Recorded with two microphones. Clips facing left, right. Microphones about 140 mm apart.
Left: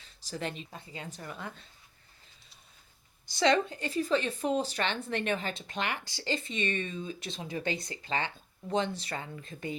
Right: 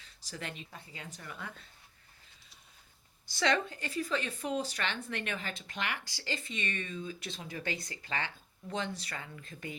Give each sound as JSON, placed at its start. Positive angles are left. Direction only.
{"t": 0.3, "sound": "speech", "side_deg": 30}
{"t": 3.2, "sound": "speech", "side_deg": 20}